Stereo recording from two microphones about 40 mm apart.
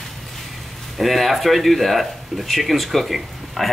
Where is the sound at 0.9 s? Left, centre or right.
Centre.